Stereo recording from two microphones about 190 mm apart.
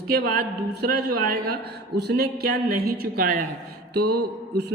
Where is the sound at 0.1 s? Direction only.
50° right (ahead or behind).